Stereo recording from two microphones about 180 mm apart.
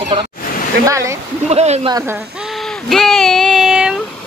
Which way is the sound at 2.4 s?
Centre (ahead or behind).